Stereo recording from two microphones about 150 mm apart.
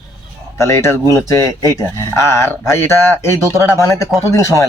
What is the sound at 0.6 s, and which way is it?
Speech, 15° left (ahead or behind).